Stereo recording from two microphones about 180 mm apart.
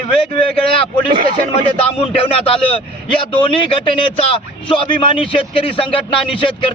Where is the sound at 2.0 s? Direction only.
30° left (ahead or behind).